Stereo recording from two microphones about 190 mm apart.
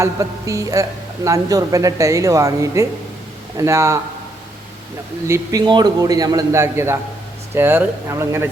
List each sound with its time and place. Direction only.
0.0 s speech: 15° right (ahead or behind)
5.3 s a man's voice: 20° right (ahead or behind)